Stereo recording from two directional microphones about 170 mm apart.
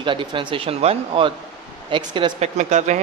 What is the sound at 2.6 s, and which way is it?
Speech, 45° right (ahead or behind).